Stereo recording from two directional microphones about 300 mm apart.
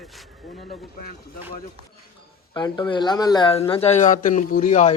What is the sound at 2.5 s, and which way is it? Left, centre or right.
Speech, centre.